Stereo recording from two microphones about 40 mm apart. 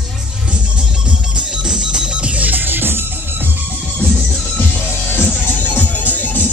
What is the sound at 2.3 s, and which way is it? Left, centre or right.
Music, right.